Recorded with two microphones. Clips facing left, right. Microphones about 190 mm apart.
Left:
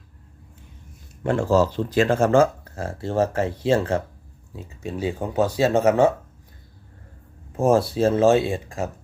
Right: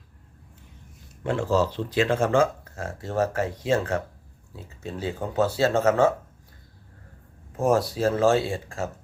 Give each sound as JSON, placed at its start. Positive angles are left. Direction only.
{"t": 1.2, "sound": "speech", "side_deg": 50}
{"t": 4.5, "sound": "speech", "side_deg": 15}
{"t": 7.5, "sound": "speech", "side_deg": 25}